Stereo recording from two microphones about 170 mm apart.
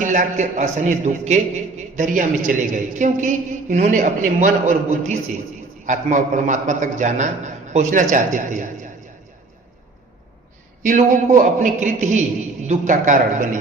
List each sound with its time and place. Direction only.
0.0 s a man's voice: 45° right (ahead or behind)
10.8 s a man's voice: 50° right (ahead or behind)